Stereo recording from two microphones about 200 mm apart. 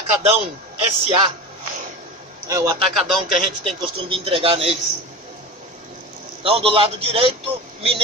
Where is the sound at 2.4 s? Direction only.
15° right (ahead or behind).